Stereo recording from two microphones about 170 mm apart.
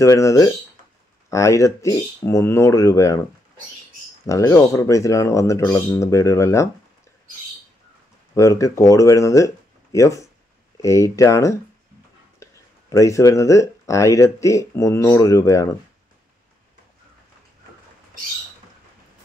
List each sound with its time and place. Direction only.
0.0 s speech: 20° left (ahead or behind)
4.3 s speech: 15° left (ahead or behind)
8.4 s speech: 20° left (ahead or behind)
12.4 s a sound: 15° left (ahead or behind)
12.9 s speech: 20° left (ahead or behind)